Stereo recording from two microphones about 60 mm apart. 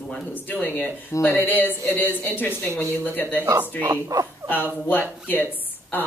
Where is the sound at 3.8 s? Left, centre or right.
Right.